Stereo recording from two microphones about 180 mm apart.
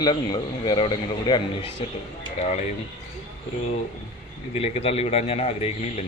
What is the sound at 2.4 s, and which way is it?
Speech, 40° left (ahead or behind).